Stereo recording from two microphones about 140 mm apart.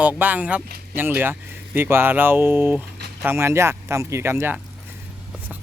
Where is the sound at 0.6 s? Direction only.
90° right.